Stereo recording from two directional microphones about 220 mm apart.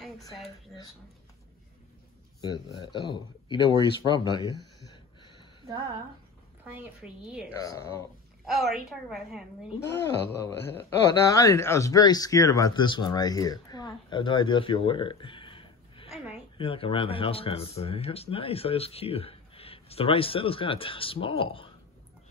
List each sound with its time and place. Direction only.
0.0 s a sound: centre (ahead or behind)
2.4 s speech: 20° left (ahead or behind)
4.9 s a sound: 20° left (ahead or behind)
5.7 s speech: 15° right (ahead or behind)
6.6 s a woman's voice: 5° right (ahead or behind)
7.5 s speech: 15° left (ahead or behind)
8.5 s a woman's voice: centre (ahead or behind)
9.8 s speech: 10° left (ahead or behind)